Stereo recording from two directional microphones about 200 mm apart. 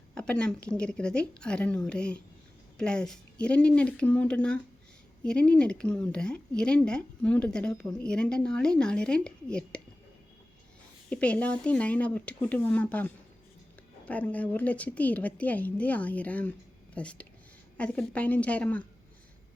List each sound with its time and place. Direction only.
0.1 s a woman's voice: 5° left (ahead or behind)
11.1 s a woman's voice: 5° left (ahead or behind)